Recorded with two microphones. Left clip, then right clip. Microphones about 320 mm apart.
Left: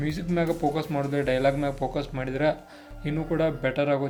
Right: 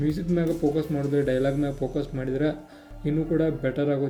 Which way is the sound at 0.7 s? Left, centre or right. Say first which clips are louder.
Right 2 dB; left.